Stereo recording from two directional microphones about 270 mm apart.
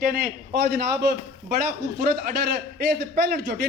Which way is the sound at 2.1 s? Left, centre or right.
Right.